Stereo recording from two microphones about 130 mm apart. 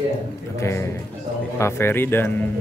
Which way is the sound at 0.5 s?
20° left (ahead or behind).